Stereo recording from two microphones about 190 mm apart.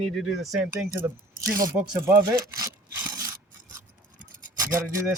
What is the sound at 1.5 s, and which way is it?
Speech, 15° right (ahead or behind).